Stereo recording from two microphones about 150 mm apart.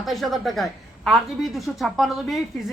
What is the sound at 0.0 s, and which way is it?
A woman's voice, centre (ahead or behind).